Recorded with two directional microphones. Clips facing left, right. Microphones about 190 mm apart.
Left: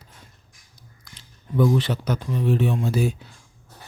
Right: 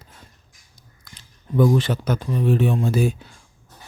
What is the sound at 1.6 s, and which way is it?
Speech, 50° right (ahead or behind).